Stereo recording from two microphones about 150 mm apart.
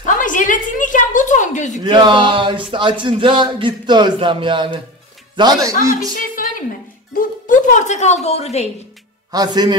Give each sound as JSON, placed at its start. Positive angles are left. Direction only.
{"t": 0.0, "sound": "a sound", "side_deg": 60}
{"t": 1.8, "sound": "a man's voice", "side_deg": -30}
{"t": 7.2, "sound": "a woman's voice", "side_deg": 60}
{"t": 9.3, "sound": "a man's voice", "side_deg": -25}